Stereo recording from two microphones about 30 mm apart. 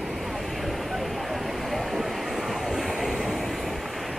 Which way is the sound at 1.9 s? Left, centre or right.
Centre.